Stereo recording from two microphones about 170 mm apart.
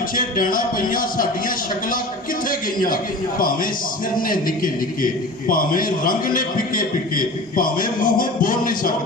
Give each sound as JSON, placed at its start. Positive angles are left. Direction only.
{"t": 0.2, "sound": "a man's voice", "side_deg": 55}